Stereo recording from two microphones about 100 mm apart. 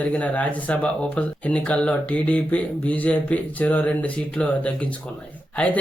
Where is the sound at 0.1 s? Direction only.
15° left (ahead or behind).